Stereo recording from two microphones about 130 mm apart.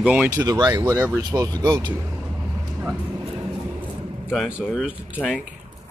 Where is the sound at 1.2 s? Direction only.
30° right (ahead or behind).